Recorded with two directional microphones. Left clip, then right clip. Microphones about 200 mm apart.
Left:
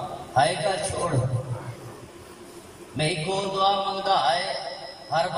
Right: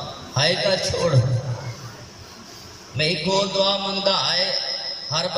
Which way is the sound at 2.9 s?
45° right (ahead or behind).